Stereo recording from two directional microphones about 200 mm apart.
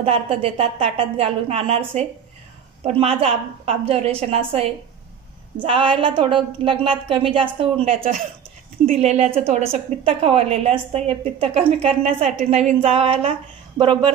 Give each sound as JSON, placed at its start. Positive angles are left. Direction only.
{"t": 0.0, "sound": "a woman's voice", "side_deg": -30}